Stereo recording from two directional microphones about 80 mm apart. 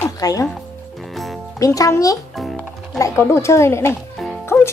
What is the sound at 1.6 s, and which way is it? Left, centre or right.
Speech, left.